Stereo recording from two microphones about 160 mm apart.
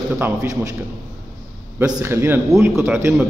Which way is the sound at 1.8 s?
15° right (ahead or behind).